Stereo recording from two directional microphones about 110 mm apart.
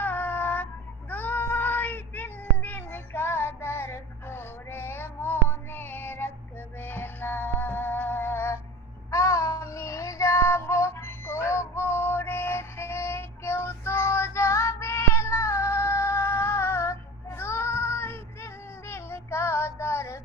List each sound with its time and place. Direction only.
0.0 s child singing: 15° left (ahead or behind)
6.8 s music: 15° left (ahead or behind)
9.0 s child singing: 25° left (ahead or behind)